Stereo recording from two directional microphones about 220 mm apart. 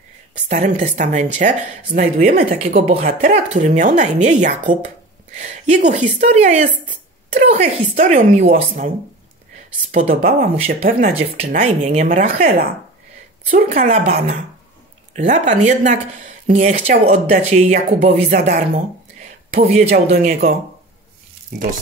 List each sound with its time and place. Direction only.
0.5 s speech: 35° right (ahead or behind)
19.1 s a sound: 40° right (ahead or behind)
20.1 s speech: 40° right (ahead or behind)